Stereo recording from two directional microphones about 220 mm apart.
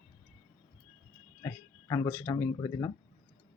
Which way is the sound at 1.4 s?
15° left (ahead or behind).